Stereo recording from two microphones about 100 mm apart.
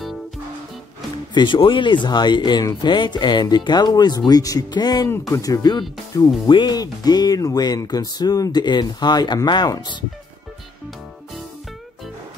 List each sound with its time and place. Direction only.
1.3 s speech: 55° left (ahead or behind)